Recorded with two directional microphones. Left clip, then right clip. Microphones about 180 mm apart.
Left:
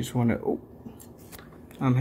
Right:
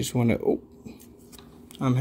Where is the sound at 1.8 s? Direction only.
40° right (ahead or behind).